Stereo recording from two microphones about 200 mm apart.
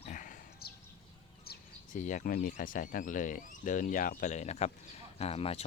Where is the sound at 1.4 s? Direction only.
40° left (ahead or behind).